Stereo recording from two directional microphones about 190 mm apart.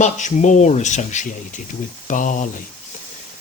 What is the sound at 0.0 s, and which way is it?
Speech, 40° left (ahead or behind).